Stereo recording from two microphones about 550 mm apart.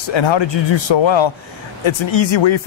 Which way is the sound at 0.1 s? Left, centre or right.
Left.